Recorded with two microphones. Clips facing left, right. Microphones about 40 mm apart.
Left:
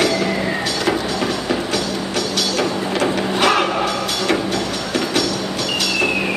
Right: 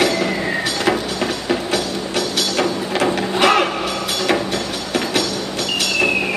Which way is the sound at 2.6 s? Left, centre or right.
Centre.